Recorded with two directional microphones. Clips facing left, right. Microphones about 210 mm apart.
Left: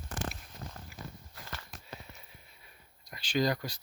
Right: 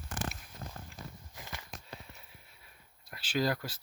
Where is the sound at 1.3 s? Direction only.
15° right (ahead or behind).